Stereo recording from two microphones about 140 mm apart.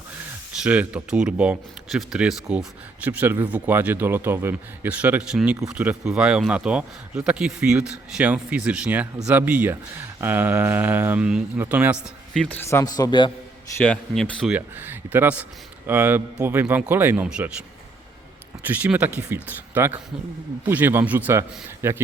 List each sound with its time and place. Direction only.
0.6 s speech: 10° right (ahead or behind)
12.3 s a man's voice: centre (ahead or behind)
12.5 s a man's voice: 20° left (ahead or behind)
13.8 s speech: 5° left (ahead or behind)
14.5 s speech: 15° right (ahead or behind)
18.7 s speech: 10° right (ahead or behind)